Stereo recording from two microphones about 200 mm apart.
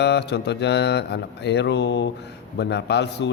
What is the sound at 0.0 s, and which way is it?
A man's voice, 60° left (ahead or behind).